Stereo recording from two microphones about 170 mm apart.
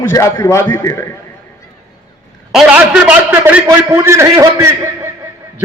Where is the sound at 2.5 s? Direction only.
5° right (ahead or behind).